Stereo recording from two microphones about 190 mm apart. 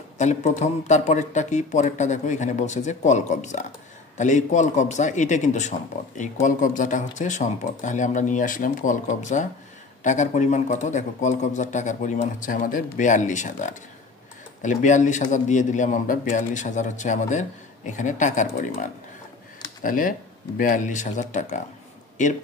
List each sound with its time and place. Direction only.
0.2 s a man's voice: 40° left (ahead or behind)